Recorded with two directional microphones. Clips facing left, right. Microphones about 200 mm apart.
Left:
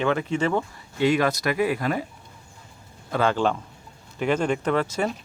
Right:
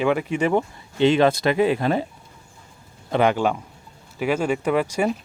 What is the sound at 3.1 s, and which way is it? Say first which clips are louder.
Speech: right 3 dB; 15° right (ahead or behind).